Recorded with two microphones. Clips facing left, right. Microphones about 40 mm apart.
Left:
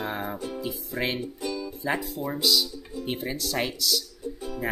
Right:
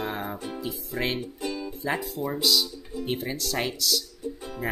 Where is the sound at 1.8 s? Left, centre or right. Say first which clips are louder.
Even; centre.